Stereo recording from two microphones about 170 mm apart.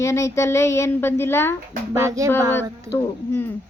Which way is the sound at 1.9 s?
15° right (ahead or behind).